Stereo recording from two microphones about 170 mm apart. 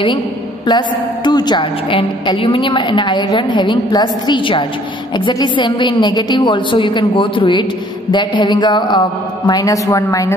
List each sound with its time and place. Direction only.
0.7 s a woman's voice: 25° left (ahead or behind)